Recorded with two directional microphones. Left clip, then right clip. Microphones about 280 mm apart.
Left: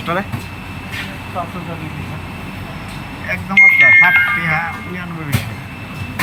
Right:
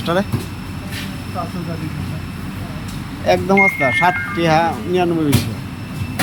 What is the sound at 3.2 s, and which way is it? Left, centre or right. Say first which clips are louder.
Speech: right 8 dB; right.